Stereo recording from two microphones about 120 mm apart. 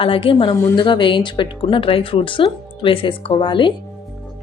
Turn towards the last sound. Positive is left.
turn(degrees=40)  # may be behind; listen again after turning